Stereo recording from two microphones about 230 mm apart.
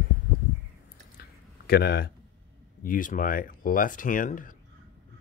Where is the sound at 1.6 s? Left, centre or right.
Left.